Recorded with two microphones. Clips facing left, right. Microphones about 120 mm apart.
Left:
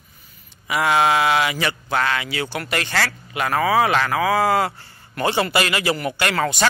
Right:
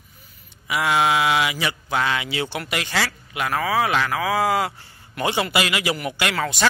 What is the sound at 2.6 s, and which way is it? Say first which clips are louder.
A man's voice: left 2 dB; 10° right (ahead or behind).